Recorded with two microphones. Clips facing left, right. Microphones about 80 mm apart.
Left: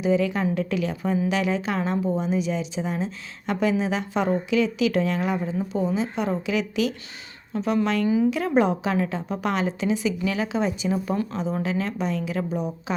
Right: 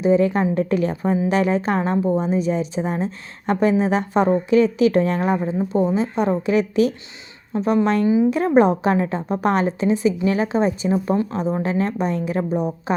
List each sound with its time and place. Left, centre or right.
0.0 s a woman's voice: right
8.0 s speech: right
8.3 s a woman's voice: right
11.0 s speech: right
11.6 s a woman's voice: right